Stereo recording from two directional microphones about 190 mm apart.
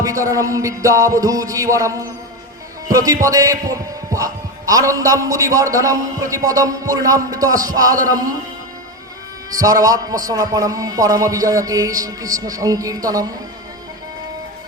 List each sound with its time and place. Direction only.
0.0 s a man's voice: 15° right (ahead or behind)
9.6 s a man's voice: 20° right (ahead or behind)